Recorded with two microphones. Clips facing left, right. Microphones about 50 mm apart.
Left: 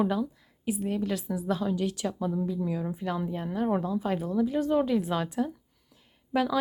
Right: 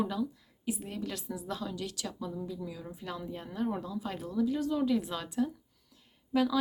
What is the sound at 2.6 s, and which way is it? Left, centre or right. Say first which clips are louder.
Speech: left 10 dB; left.